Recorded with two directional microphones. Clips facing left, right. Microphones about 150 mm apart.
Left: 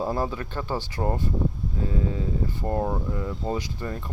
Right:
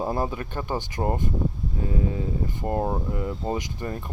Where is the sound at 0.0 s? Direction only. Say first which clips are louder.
Even; 15° right (ahead or behind).